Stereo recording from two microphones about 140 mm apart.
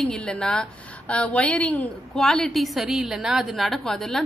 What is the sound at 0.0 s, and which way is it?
A woman's voice, 5° left (ahead or behind).